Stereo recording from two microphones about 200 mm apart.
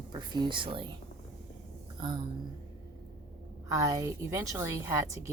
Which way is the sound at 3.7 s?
15° right (ahead or behind).